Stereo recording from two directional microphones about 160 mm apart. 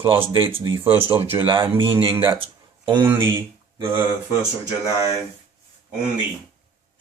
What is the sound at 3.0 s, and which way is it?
Speech, 15° right (ahead or behind).